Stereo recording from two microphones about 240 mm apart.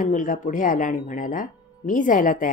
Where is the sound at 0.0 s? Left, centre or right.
Left.